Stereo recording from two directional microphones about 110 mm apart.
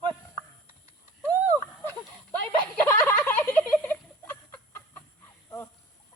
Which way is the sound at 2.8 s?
15° left (ahead or behind).